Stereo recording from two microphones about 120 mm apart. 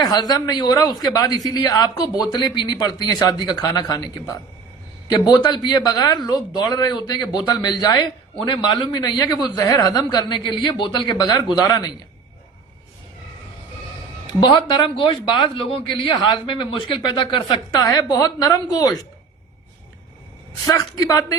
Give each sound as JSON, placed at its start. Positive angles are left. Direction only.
{"t": 0.0, "sound": "speech", "side_deg": 35}
{"t": 14.3, "sound": "speech", "side_deg": 40}
{"t": 16.1, "sound": "speech", "side_deg": 40}
{"t": 20.7, "sound": "a woman's voice", "side_deg": 30}